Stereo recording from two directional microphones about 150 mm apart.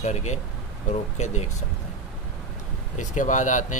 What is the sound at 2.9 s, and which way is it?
Speech, 55° left (ahead or behind).